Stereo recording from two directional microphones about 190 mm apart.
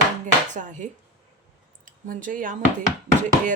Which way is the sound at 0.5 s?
40° right (ahead or behind).